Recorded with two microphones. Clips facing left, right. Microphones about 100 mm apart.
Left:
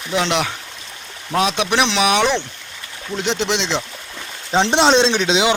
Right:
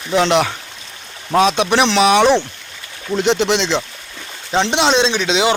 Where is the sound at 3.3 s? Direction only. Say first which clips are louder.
Right 4 dB; 5° right (ahead or behind).